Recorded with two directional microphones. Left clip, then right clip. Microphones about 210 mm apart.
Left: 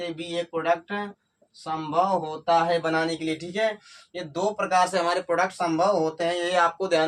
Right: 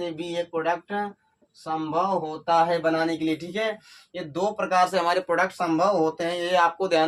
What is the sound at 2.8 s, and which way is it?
A man's voice, 10° right (ahead or behind).